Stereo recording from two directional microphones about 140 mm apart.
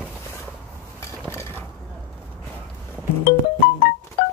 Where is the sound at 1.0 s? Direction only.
20° left (ahead or behind).